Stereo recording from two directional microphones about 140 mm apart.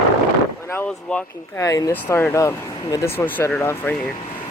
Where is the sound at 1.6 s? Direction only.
25° left (ahead or behind).